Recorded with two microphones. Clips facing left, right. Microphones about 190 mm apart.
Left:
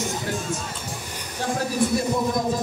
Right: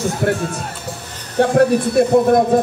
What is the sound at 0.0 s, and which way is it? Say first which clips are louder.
Speech: right 9 dB; 65° right (ahead or behind).